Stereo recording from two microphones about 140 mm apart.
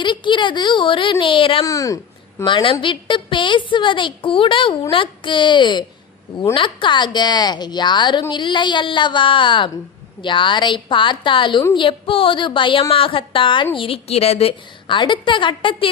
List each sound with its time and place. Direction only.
0.0 s a woman's voice: 35° left (ahead or behind)
1.6 s speech: 25° left (ahead or behind)
2.4 s a woman's voice: 35° left (ahead or behind)